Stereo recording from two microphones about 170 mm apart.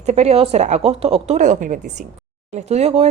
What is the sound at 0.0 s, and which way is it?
Speech, 40° right (ahead or behind).